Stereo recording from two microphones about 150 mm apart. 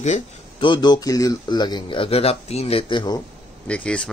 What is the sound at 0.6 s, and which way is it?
Speech, 30° left (ahead or behind).